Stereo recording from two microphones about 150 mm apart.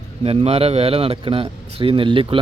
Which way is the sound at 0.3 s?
40° right (ahead or behind).